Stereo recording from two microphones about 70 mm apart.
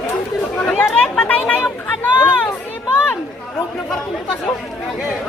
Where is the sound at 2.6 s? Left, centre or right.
Left.